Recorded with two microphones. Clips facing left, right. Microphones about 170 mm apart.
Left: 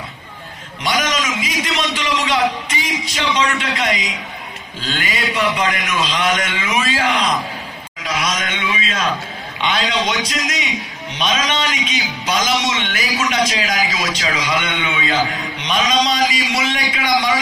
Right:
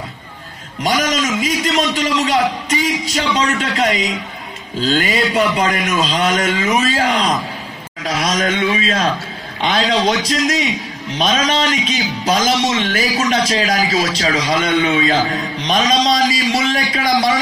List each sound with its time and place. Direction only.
0.8 s a man's voice: 40° right (ahead or behind)